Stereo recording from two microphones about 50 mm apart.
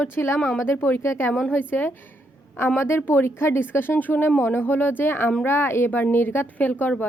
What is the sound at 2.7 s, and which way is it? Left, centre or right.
Speech, left.